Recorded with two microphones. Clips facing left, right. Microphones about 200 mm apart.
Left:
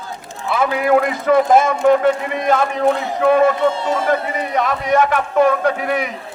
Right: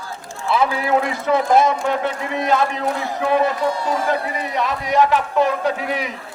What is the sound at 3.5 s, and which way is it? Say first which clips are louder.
Speech: left 3 dB; 25° left (ahead or behind).